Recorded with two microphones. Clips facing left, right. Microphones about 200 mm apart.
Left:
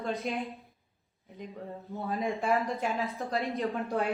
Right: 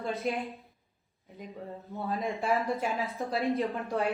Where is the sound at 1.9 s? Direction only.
Centre (ahead or behind).